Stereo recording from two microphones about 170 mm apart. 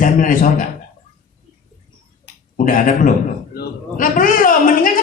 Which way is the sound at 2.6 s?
55° left (ahead or behind).